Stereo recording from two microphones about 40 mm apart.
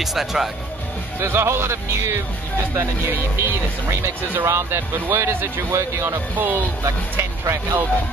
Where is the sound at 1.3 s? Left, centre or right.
Right.